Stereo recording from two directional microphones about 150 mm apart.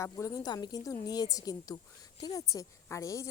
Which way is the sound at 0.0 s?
20° left (ahead or behind).